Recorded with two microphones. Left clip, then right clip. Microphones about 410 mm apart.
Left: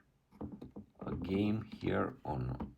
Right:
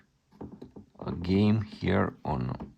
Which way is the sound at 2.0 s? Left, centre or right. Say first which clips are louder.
Right 7 dB; right.